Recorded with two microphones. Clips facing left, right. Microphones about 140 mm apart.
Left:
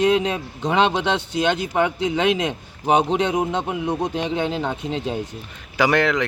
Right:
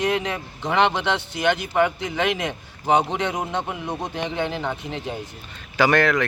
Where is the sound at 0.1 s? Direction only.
15° left (ahead or behind).